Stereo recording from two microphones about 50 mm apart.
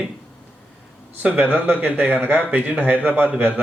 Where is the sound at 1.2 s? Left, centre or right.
Right.